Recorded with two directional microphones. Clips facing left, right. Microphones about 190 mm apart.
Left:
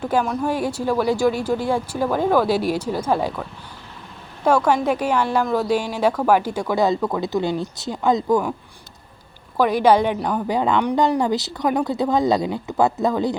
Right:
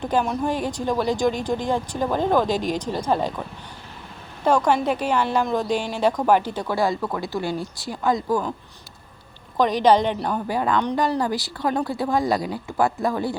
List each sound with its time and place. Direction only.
0.0 s speech: 5° left (ahead or behind)
4.4 s speech: 10° left (ahead or behind)
9.6 s speech: 10° left (ahead or behind)
10.4 s speech: 20° left (ahead or behind)